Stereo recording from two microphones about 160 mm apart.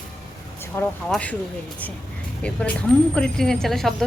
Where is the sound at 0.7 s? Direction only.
15° left (ahead or behind).